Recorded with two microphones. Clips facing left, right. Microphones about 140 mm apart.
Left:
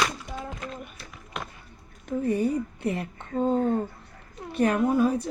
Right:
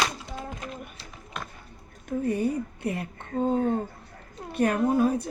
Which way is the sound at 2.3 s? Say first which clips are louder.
Left 2 dB; 50° right (ahead or behind).